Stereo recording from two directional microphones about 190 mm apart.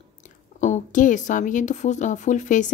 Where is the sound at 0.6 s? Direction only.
40° left (ahead or behind).